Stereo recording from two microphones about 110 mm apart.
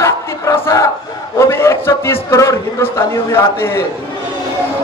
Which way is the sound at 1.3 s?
25° left (ahead or behind).